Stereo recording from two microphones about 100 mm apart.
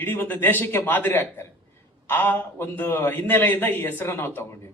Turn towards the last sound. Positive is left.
turn(degrees=25)  # may be behind; listen again after turning